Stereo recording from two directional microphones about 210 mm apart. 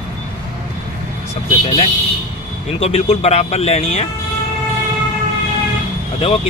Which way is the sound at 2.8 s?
30° left (ahead or behind).